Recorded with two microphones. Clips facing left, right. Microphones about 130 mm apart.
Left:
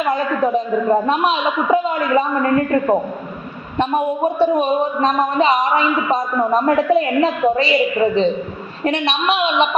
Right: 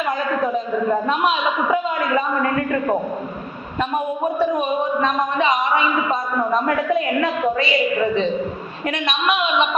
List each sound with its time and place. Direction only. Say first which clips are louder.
0.5 s a man's voice: left 4 dB; 35° left (ahead or behind)
4.4 s a man's voice: left 4 dB; 30° left (ahead or behind)